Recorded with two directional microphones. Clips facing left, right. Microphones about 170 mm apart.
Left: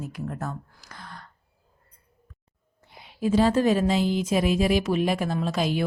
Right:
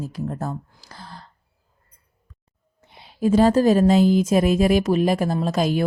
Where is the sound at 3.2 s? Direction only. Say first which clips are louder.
Right 5 dB; 45° right (ahead or behind).